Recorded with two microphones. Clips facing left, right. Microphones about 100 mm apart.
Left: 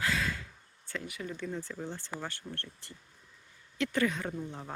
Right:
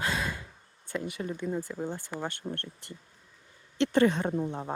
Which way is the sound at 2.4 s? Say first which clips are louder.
Right 6 dB; 45° right (ahead or behind).